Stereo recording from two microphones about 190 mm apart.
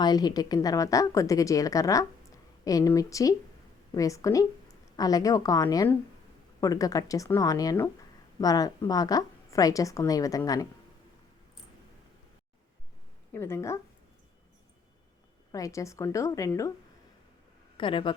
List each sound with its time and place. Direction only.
0.0 s a woman's voice: 20° left (ahead or behind)
13.3 s a woman's voice: 15° left (ahead or behind)
15.5 s a woman's voice: 15° left (ahead or behind)
17.7 s a woman's voice: 25° left (ahead or behind)